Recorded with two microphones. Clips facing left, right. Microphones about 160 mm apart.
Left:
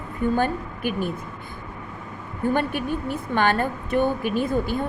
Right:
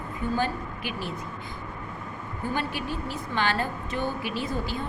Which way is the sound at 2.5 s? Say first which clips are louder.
Left 6 dB; 55° left (ahead or behind).